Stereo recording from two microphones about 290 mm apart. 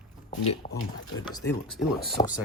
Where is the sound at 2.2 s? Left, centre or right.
Centre.